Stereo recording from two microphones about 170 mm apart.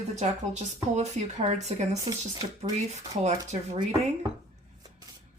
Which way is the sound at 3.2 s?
40° right (ahead or behind).